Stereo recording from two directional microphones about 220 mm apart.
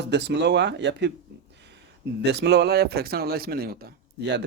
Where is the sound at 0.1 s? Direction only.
50° right (ahead or behind).